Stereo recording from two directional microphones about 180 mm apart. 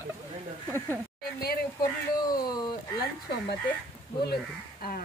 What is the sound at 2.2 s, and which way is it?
Speech, 20° left (ahead or behind).